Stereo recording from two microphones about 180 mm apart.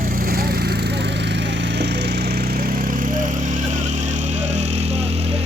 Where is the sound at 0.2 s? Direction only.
55° right (ahead or behind); by 5.3 s 35° right (ahead or behind).